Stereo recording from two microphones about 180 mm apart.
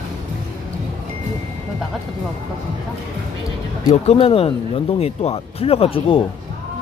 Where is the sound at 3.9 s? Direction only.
35° left (ahead or behind).